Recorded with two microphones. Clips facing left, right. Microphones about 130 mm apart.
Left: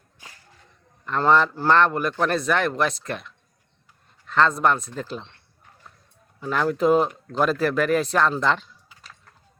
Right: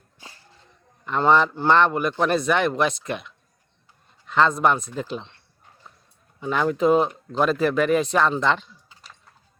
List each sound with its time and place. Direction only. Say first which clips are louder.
0.2 s whip: right 2 dB; 30° right (ahead or behind)
1.0 s speech: right 1 dB; 5° right (ahead or behind)
6.4 s speech: right 1 dB; centre (ahead or behind)